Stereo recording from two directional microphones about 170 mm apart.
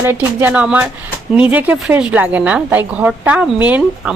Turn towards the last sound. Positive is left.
turn(degrees=-10)  # may be behind; listen again after turning